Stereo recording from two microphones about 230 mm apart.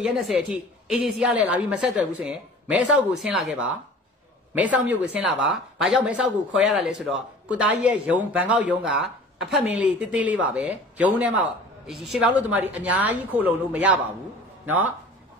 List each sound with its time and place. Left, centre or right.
0.0 s a woman's voice: centre